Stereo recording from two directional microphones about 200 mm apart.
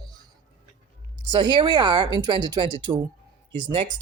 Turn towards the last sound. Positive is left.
turn(degrees=-25)  # may be behind; listen again after turning